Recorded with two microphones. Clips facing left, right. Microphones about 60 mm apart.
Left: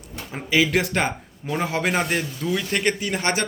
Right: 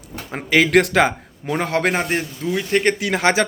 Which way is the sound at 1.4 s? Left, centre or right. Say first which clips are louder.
Right 4 dB; right.